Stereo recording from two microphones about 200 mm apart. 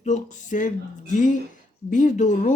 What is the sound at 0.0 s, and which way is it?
Speech, 35° left (ahead or behind).